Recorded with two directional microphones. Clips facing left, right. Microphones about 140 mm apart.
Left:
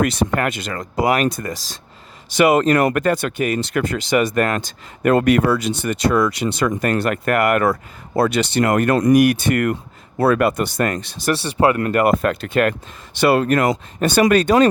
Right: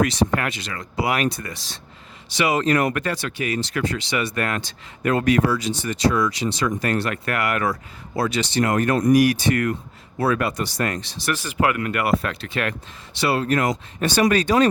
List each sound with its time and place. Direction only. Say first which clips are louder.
0.0 s speech: left 2 dB; 55° left (ahead or behind)
11.3 s speech: left 5 dB; 30° left (ahead or behind); by 14.7 s 55° left (ahead or behind)